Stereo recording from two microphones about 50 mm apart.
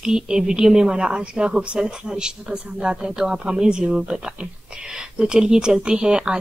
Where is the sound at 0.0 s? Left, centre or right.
Centre.